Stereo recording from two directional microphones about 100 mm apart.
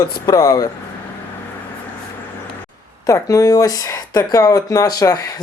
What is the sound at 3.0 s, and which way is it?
Speech, 35° left (ahead or behind).